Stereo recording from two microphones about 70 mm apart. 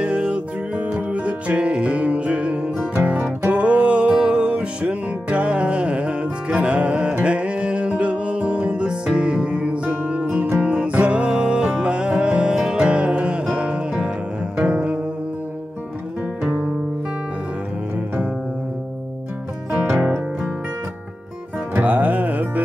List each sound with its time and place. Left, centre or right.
0.0 s music: centre
16.4 s music: centre
19.7 s music: centre
21.7 s music: right